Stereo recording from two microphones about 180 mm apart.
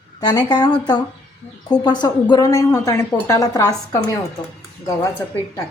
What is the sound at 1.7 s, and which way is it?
A woman's voice, 25° left (ahead or behind).